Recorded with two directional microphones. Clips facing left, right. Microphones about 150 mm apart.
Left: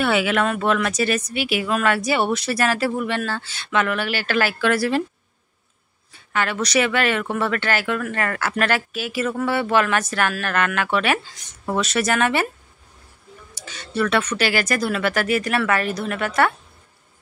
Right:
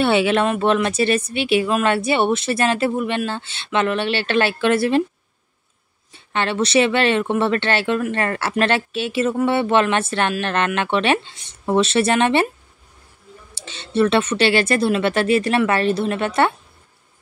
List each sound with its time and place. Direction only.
0.0 s speech: 25° right (ahead or behind)
6.1 s speech: 25° right (ahead or behind)
13.6 s speech: 25° right (ahead or behind)